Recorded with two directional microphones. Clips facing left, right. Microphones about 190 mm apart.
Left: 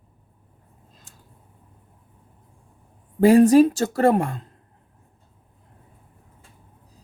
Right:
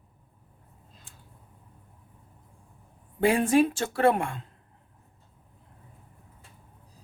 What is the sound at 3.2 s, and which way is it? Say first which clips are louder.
Speech: left 9 dB; 40° left (ahead or behind).